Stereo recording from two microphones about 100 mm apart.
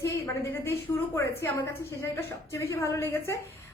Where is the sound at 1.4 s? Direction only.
30° left (ahead or behind).